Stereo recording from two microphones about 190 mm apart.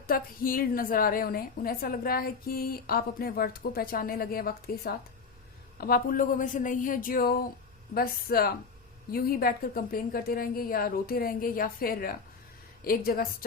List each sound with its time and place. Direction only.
0.1 s a woman's voice: 50° left (ahead or behind)